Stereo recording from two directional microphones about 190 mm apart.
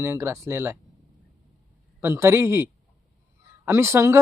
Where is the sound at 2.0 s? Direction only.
15° right (ahead or behind).